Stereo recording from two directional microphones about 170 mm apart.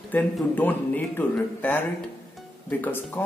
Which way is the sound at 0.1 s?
10° left (ahead or behind).